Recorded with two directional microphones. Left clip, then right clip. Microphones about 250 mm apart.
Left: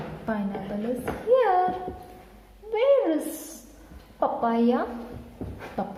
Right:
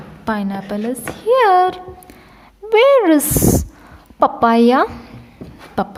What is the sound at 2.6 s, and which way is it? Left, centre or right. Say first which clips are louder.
Speech: right 11 dB; right.